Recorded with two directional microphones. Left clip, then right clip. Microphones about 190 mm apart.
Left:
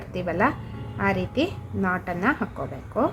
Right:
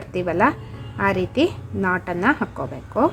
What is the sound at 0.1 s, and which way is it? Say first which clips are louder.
A woman's voice: right 5 dB; 20° right (ahead or behind).